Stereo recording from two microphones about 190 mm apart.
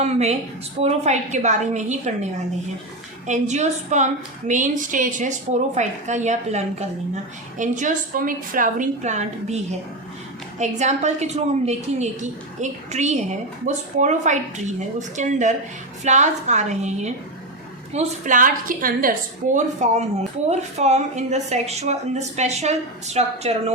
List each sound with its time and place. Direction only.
0.0 s a woman's voice: 35° right (ahead or behind)
3.2 s a woman's voice: 40° right (ahead or behind)
10.6 s a woman's voice: 35° right (ahead or behind)
19.5 s a woman's voice: 35° right (ahead or behind)